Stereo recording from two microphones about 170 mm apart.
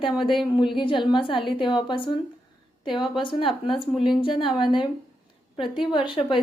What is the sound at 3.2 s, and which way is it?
Speech, 30° left (ahead or behind).